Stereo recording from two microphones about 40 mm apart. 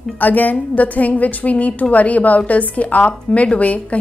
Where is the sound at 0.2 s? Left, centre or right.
Left.